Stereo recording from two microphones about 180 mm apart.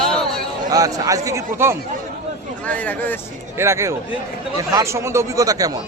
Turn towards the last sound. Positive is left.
turn(degrees=-20)  # may be behind; listen again after turning